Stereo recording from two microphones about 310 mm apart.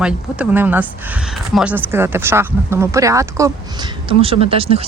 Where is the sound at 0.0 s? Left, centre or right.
Centre.